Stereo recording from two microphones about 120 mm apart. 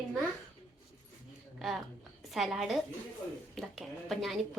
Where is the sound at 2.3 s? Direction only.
Centre (ahead or behind).